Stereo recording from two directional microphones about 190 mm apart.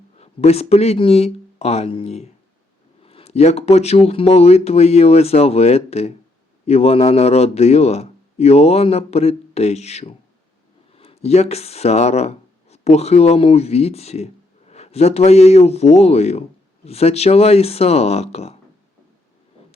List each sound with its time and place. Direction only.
0.2 s a man's voice: 30° left (ahead or behind)